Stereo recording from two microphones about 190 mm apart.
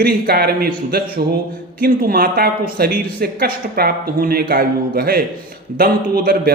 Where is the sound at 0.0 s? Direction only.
55° right (ahead or behind).